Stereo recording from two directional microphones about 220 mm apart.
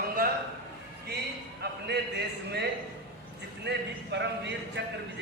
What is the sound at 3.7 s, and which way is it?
Speech, 55° right (ahead or behind).